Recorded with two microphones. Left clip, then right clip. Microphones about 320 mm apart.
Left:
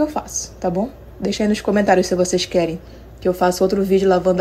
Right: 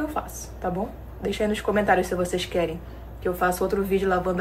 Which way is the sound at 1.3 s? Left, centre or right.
Centre.